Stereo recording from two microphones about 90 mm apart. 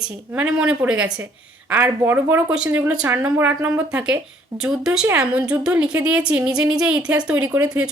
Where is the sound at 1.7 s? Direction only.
25° right (ahead or behind).